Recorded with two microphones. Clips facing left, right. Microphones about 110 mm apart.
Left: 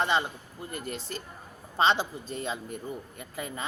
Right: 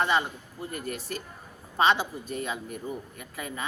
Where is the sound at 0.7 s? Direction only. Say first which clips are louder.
Right 1 dB; 30° left (ahead or behind).